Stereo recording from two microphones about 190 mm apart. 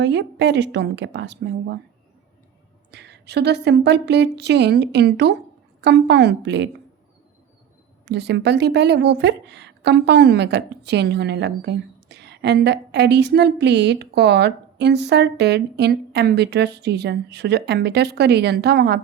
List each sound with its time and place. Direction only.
0.0 s speech: 65° right (ahead or behind)
2.9 s speech: 60° right (ahead or behind)
8.0 s speech: 65° right (ahead or behind)